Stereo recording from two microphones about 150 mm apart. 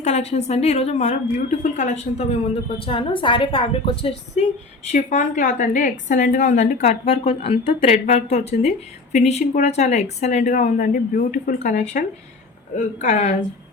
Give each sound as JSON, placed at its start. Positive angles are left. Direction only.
{"t": 0.0, "sound": "a woman's voice", "side_deg": 45}
{"t": 2.8, "sound": "a woman's voice", "side_deg": 35}
{"t": 4.9, "sound": "a woman's voice", "side_deg": 55}